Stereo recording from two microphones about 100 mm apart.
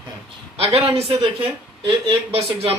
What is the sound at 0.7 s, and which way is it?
Speech, 85° right.